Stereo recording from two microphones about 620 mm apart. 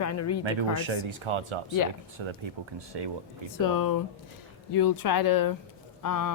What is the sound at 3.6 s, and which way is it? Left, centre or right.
Speech, left.